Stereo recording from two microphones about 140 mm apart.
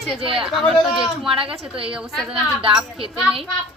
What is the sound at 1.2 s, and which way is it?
Speech, 40° right (ahead or behind).